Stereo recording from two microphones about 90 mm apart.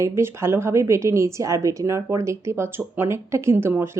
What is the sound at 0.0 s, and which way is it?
A woman's voice, 30° right (ahead or behind).